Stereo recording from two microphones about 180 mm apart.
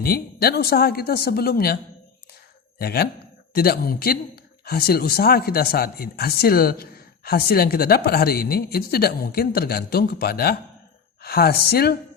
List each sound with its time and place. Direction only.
0.0 s a man's voice: 60° left (ahead or behind)